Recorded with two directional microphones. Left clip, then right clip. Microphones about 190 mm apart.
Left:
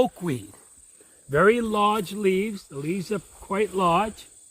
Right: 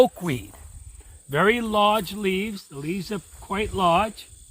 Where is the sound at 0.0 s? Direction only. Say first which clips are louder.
Right 5 dB; 35° right (ahead or behind).